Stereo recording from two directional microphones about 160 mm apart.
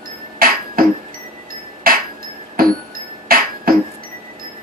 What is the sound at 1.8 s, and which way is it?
Chink, 65° right (ahead or behind).